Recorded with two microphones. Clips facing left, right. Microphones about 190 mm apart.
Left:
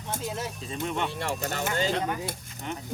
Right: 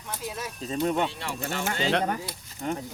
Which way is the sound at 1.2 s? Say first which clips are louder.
Left 1 dB; 40° left (ahead or behind).